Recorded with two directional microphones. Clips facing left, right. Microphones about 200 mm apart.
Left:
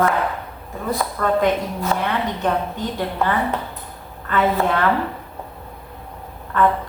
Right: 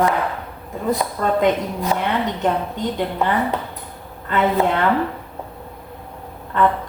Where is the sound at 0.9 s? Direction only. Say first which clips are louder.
Right 1 dB; 20° right (ahead or behind).